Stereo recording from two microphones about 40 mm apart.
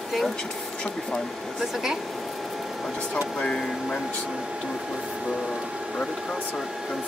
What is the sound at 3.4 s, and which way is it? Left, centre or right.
Speech, centre.